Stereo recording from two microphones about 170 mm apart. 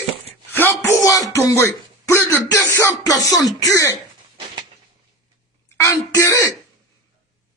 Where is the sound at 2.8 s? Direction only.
20° left (ahead or behind).